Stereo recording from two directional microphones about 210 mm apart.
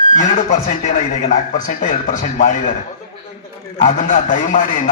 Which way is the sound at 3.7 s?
35° left (ahead or behind).